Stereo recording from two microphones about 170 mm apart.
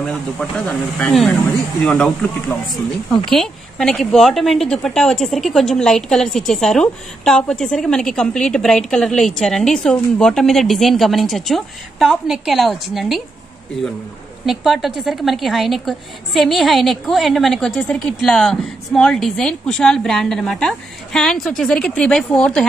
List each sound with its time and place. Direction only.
0.0 s a woman's voice: 5° left (ahead or behind)
2.7 s speech: 30° left (ahead or behind)
3.3 s a woman's voice: 5° left (ahead or behind)
14.4 s a woman's voice: centre (ahead or behind)